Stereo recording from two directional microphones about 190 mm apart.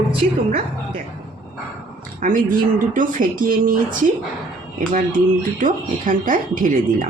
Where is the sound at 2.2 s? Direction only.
45° right (ahead or behind).